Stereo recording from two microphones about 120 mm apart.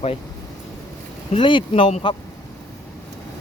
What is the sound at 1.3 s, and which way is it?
Speech, 45° left (ahead or behind).